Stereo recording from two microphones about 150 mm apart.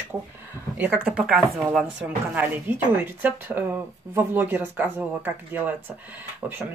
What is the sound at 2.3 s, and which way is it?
Speech, 10° right (ahead or behind).